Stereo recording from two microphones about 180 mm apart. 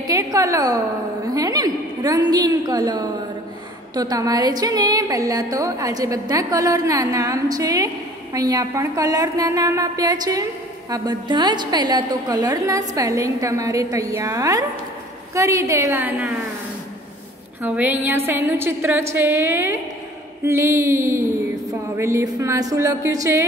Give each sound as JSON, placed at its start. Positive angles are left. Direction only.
{"t": 0.0, "sound": "a woman's voice", "side_deg": -20}
{"t": 1.3, "sound": "a sound", "side_deg": -20}
{"t": 3.9, "sound": "a woman's voice", "side_deg": -20}
{"t": 17.6, "sound": "a woman's voice", "side_deg": -10}